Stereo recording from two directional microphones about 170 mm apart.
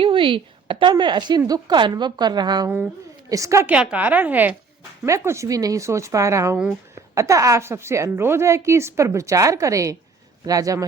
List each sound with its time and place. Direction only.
0.0 s a woman's voice: 30° right (ahead or behind)
2.6 s a woman's voice: 10° right (ahead or behind)